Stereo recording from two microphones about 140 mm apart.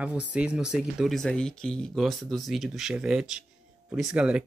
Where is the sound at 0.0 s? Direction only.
10° right (ahead or behind).